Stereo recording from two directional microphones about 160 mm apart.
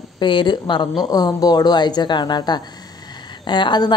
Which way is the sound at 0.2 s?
30° left (ahead or behind).